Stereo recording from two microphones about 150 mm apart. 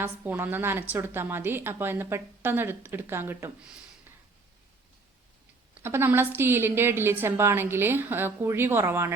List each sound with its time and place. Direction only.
0.0 s a woman's voice: 15° right (ahead or behind)
5.8 s a woman's voice: 15° right (ahead or behind)